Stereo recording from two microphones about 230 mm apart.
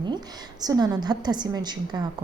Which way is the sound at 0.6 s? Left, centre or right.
Centre.